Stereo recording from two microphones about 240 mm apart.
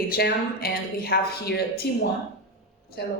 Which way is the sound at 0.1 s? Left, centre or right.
Left.